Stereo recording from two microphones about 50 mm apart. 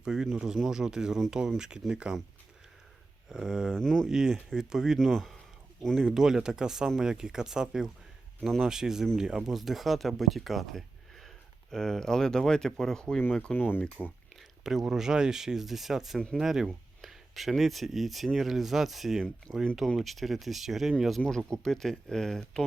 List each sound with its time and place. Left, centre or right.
0.0 s speech: centre
3.2 s speech: centre
3.8 s speech: centre
4.1 s speech: centre
4.9 s speech: centre
6.0 s speech: centre
13.5 s speech: left
14.6 s speech: centre
21.2 s speech: centre